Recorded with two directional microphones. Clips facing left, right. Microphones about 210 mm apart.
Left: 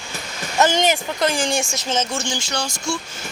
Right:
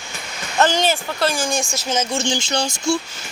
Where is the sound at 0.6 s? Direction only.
15° left (ahead or behind).